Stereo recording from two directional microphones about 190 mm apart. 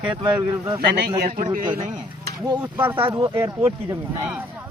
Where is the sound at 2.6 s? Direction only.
10° right (ahead or behind).